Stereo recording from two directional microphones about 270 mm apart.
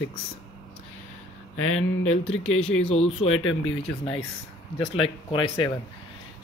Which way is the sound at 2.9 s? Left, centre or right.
Left.